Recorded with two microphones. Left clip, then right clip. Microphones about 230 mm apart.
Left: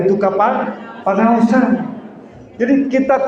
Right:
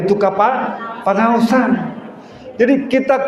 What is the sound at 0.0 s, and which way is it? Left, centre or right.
A man's voice, right.